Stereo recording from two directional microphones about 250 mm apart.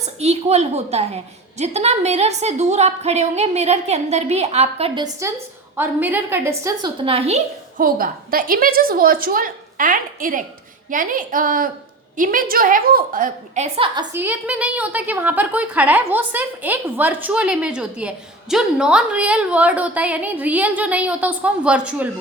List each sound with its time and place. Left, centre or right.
0.2 s a woman's voice: right
13.7 s a woman's voice: right
14.1 s a woman's voice: centre